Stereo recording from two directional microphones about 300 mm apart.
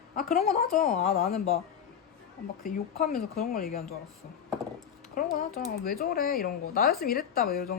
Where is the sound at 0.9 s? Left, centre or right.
Left.